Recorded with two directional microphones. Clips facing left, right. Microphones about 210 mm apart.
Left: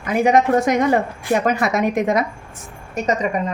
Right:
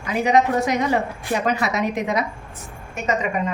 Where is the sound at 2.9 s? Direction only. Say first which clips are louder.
Left 3 dB; 35° left (ahead or behind).